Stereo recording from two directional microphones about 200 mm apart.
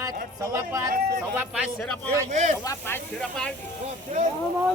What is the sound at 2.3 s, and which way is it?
Speech, 35° right (ahead or behind).